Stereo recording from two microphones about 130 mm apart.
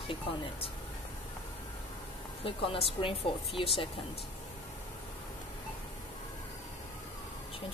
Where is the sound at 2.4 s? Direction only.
45° left (ahead or behind).